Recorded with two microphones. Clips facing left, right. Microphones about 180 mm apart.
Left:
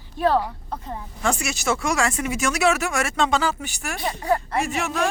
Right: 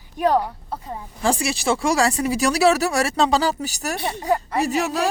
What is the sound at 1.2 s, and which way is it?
Speech, 30° right (ahead or behind).